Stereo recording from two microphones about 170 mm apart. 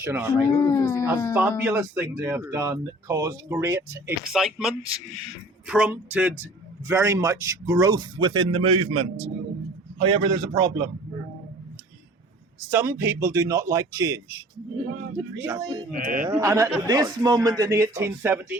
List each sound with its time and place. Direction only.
0.0 s speech: 15° right (ahead or behind)
0.5 s speech: 20° left (ahead or behind)
1.4 s speech: 10° right (ahead or behind)
4.3 s a man's voice: centre (ahead or behind); by 10.8 s 25° right (ahead or behind)
12.5 s speech: 15° right (ahead or behind)
15.9 s a man's voice: 55° right (ahead or behind)
16.2 s a man's voice: 15° right (ahead or behind)